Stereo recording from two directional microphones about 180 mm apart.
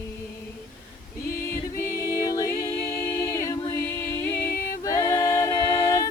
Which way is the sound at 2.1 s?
15° left (ahead or behind).